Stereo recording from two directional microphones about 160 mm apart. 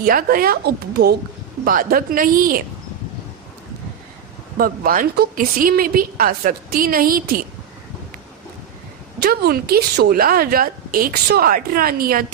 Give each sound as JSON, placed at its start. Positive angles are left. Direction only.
{"t": 0.0, "sound": "a woman's voice", "side_deg": -65}
{"t": 1.6, "sound": "a woman's voice", "side_deg": -60}
{"t": 4.5, "sound": "a woman's voice", "side_deg": -65}
{"t": 9.2, "sound": "a woman's voice", "side_deg": -75}